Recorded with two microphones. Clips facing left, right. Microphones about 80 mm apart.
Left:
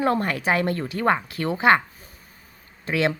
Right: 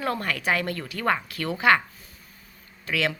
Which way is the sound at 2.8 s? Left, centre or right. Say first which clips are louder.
Left 4 dB; left.